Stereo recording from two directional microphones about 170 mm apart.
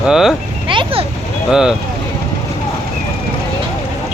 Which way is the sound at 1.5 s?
5° right (ahead or behind).